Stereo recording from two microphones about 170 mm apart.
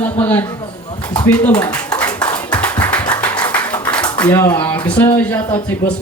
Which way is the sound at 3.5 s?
10° left (ahead or behind).